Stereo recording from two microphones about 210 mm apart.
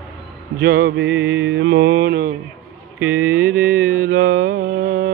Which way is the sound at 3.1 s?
90° right.